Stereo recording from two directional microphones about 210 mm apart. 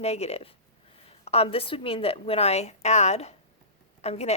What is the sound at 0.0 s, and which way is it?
A woman's voice, 30° left (ahead or behind).